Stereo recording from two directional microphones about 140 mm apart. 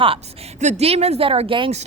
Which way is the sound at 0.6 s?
50° right (ahead or behind).